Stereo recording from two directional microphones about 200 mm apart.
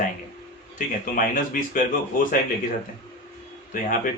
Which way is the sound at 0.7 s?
40° left (ahead or behind).